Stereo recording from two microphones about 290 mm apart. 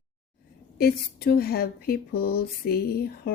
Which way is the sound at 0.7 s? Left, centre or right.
Left.